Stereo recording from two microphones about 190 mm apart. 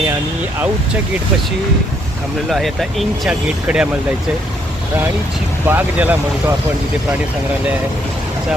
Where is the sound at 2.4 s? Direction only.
Centre (ahead or behind).